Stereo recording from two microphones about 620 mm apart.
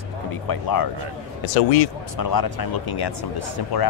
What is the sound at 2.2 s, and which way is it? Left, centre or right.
Speech, left.